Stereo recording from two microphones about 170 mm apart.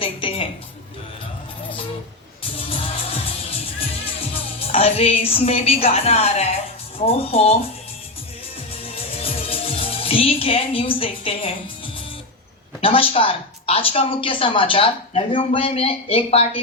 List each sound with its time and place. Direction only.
0.0 s a sound: 30° left (ahead or behind)
2.4 s music: 35° left (ahead or behind)
7.0 s speech: 35° left (ahead or behind)
9.2 s speech: 35° left (ahead or behind)
12.8 s speech: 35° left (ahead or behind)